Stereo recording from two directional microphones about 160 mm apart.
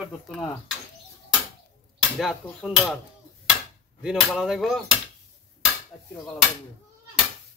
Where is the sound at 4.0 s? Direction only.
5° right (ahead or behind).